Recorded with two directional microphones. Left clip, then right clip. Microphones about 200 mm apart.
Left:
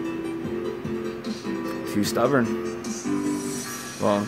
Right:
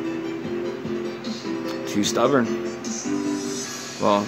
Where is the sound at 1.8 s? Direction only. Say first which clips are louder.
Right 2 dB; 5° left (ahead or behind).